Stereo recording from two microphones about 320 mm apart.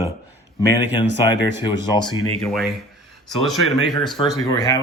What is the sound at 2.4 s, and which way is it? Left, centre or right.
Speech, centre.